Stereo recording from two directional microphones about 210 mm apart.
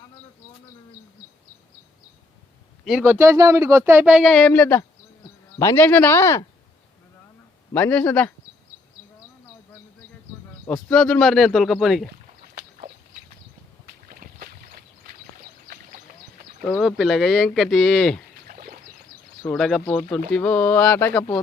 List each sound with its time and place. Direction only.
2.8 s speech: 5° right (ahead or behind); by 6.4 s 10° left (ahead or behind)
7.7 s speech: 10° left (ahead or behind)
10.7 s speech: 5° left (ahead or behind)
14.1 s boat: 45° right (ahead or behind)
15.6 s rowboat: 45° right (ahead or behind)
16.6 s speech: centre (ahead or behind)
18.4 s a sound: 40° right (ahead or behind)
19.5 s speech: centre (ahead or behind)